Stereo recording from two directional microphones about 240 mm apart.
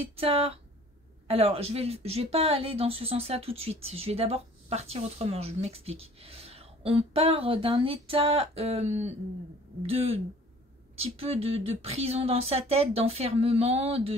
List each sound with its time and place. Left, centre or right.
0.0 s speech: right